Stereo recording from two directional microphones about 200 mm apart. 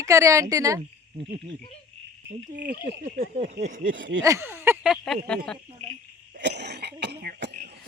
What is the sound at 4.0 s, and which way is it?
Speech, 65° right (ahead or behind).